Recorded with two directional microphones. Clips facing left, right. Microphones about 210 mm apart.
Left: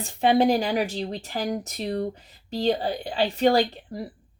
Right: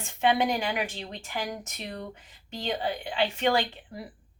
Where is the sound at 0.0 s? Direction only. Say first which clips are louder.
Left 5 dB; 35° left (ahead or behind).